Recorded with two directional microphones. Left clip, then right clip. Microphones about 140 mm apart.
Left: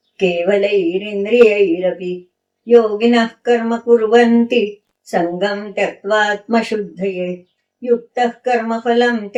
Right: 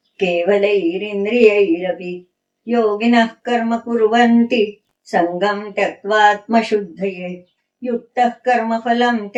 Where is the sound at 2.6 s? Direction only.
35° left (ahead or behind).